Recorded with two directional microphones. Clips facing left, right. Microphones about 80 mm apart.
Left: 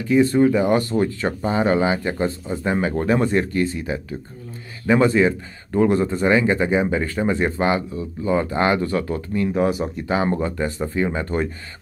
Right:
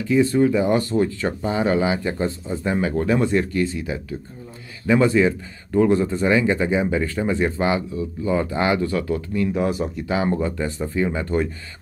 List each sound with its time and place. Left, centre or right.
0.1 s speech: left